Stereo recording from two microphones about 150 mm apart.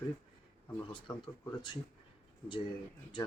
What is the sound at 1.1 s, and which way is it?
Speech, 30° left (ahead or behind).